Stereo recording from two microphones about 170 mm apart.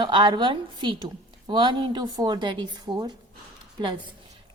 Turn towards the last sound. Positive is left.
turn(degrees=-25)  # may be behind; listen again after turning